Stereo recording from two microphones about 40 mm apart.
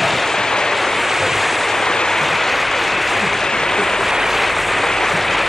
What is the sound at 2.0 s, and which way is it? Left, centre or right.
Applause, centre.